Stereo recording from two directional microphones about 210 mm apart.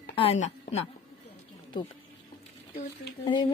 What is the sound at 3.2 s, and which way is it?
Speech, 20° left (ahead or behind).